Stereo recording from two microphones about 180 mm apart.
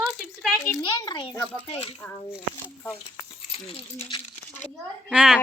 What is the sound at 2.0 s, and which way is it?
Speech, 10° left (ahead or behind).